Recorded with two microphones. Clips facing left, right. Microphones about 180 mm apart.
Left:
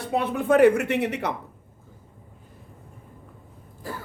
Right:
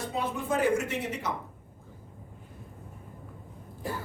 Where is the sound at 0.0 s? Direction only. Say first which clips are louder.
Left 6 dB; 65° left (ahead or behind).